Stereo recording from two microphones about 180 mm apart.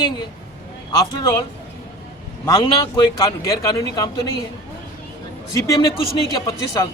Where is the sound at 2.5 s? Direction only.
20° left (ahead or behind).